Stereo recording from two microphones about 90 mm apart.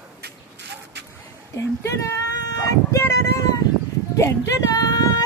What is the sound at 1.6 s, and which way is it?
A woman's voice, 35° left (ahead or behind).